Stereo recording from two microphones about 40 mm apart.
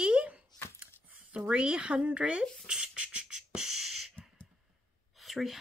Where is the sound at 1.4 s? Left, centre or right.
Right; by 4.0 s centre.